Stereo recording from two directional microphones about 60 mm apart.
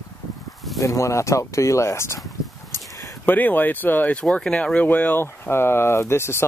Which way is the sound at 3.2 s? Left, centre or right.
Left.